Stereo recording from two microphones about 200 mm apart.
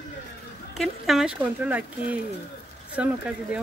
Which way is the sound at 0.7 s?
Centre (ahead or behind).